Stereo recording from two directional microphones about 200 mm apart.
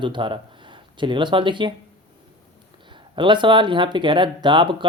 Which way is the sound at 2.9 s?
25° right (ahead or behind).